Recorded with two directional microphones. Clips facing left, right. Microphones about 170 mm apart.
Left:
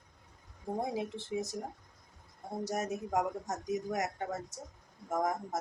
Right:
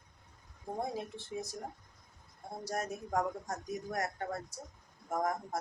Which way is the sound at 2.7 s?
20° left (ahead or behind).